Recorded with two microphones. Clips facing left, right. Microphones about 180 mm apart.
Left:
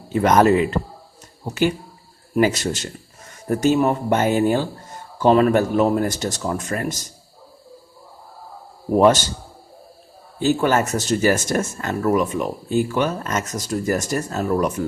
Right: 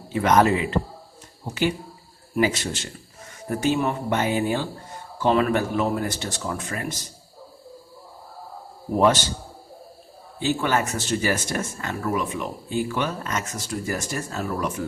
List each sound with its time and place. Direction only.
0.1 s speech: 45° left (ahead or behind)
2.4 s speech: 40° left (ahead or behind)
10.4 s speech: 45° left (ahead or behind)